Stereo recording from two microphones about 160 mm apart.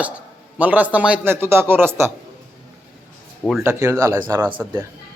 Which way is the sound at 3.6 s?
20° right (ahead or behind).